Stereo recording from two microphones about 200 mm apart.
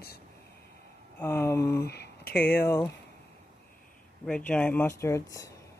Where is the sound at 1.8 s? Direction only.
55° left (ahead or behind).